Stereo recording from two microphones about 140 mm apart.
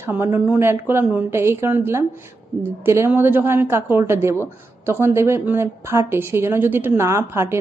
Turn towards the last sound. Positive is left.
turn(degrees=-20)  # may be behind; listen again after turning